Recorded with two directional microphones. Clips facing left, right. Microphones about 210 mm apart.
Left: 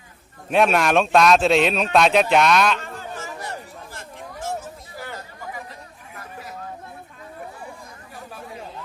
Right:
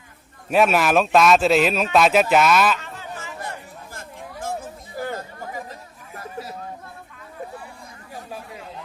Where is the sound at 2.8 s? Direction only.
50° left (ahead or behind).